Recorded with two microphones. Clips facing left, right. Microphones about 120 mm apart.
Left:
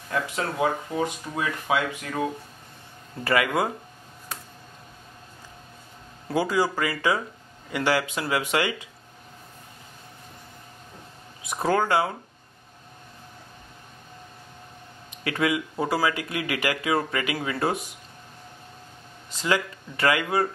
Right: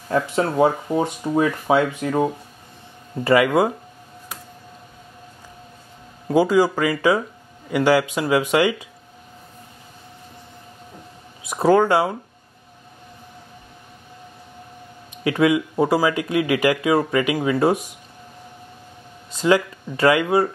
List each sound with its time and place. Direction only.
0.1 s speech: 30° right (ahead or behind)
6.2 s speech: 15° right (ahead or behind)
11.4 s speech: 20° right (ahead or behind)
15.2 s speech: 20° right (ahead or behind)
19.3 s speech: 25° right (ahead or behind)